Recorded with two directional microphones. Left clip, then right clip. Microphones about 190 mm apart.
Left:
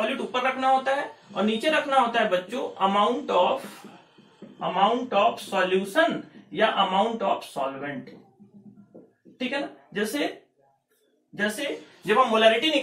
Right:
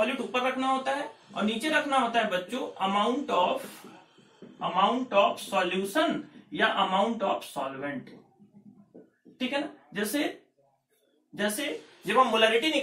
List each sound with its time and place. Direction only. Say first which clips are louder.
0.0 s speech: left 2 dB; centre (ahead or behind)
9.4 s speech: left 2 dB; centre (ahead or behind)
11.3 s speech: left 3 dB; centre (ahead or behind)
12.1 s a man's voice: left 3 dB; 15° left (ahead or behind)